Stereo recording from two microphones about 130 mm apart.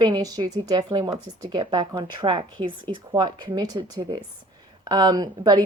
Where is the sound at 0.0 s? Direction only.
30° right (ahead or behind).